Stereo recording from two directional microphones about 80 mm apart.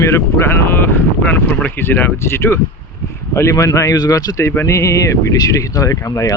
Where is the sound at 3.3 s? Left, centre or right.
Left.